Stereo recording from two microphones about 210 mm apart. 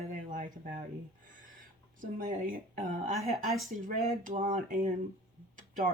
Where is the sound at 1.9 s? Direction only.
40° right (ahead or behind).